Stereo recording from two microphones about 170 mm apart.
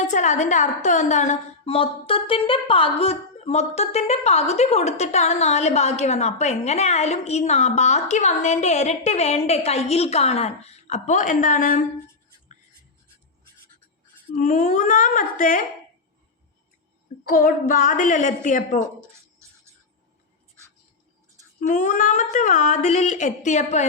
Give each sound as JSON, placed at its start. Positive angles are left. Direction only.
{"t": 0.0, "sound": "a woman's voice", "side_deg": 45}
{"t": 14.3, "sound": "a woman's voice", "side_deg": 50}
{"t": 17.2, "sound": "a woman's voice", "side_deg": 55}
{"t": 18.9, "sound": "a sound", "side_deg": -15}
{"t": 21.6, "sound": "a woman's voice", "side_deg": 50}